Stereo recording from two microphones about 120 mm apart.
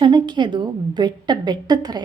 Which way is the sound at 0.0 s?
40° right (ahead or behind).